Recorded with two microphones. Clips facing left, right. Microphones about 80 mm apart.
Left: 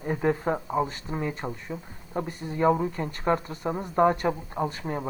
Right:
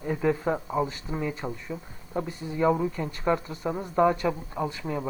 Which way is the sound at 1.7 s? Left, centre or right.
Centre.